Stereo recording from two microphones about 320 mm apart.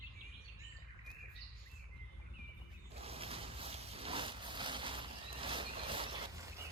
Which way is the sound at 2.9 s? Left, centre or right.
Centre.